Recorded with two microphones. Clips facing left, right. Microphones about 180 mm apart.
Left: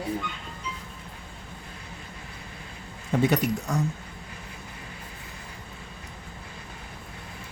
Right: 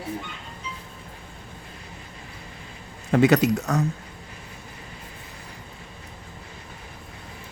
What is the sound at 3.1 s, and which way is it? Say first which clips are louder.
Speech: right 6 dB; 85° right.